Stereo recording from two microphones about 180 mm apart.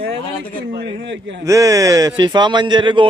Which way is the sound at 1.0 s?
85° right.